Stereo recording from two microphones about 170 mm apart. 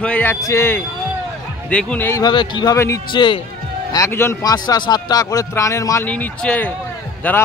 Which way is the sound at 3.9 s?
15° left (ahead or behind).